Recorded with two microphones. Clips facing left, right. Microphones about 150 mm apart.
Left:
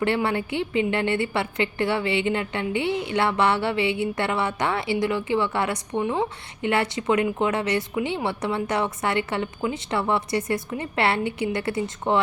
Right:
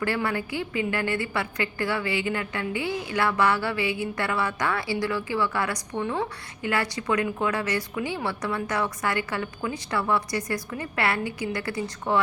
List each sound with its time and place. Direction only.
0.0 s a woman's voice: 25° left (ahead or behind)